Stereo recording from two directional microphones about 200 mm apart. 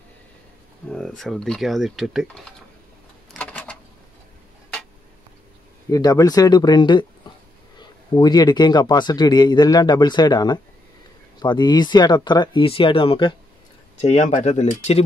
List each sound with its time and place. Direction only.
0.8 s speech: 5° left (ahead or behind)
3.3 s a sound: 5° left (ahead or behind)
5.9 s speech: 20° left (ahead or behind); by 15.0 s 35° left (ahead or behind)